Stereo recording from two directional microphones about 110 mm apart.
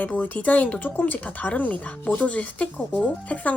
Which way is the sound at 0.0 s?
15° left (ahead or behind).